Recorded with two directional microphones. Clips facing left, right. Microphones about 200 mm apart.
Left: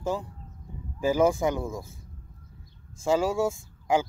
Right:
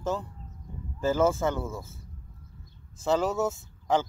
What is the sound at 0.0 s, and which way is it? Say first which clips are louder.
Speech: left 1 dB; 10° left (ahead or behind).